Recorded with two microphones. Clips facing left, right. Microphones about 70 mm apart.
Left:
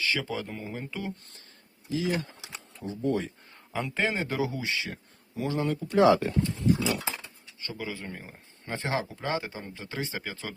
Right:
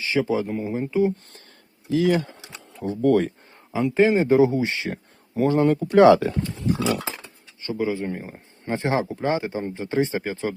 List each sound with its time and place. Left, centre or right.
0.0 s speech: right
1.9 s speech: right
3.7 s a man's voice: centre
4.2 s speech: right
4.9 s a sound: right
5.7 s speech: right
6.7 s speech: right
7.6 s speech: right